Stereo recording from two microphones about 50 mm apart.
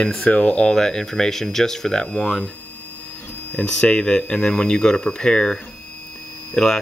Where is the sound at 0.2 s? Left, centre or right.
Centre.